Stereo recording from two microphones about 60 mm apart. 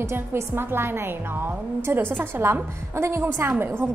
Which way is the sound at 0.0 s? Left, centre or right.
Right.